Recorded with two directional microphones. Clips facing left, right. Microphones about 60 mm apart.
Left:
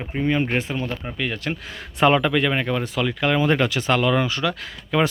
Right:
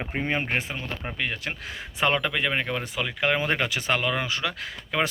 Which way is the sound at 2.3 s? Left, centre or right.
Centre.